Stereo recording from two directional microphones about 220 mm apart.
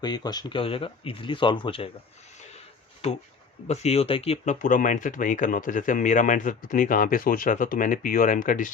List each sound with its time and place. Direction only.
0.0 s speech: 20° left (ahead or behind)
3.7 s speech: 30° left (ahead or behind)